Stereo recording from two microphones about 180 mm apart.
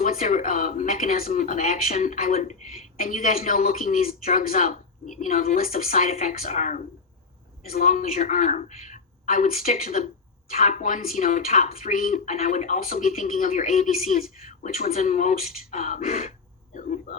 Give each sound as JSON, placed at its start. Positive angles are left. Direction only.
{"t": 0.0, "sound": "speech", "side_deg": 50}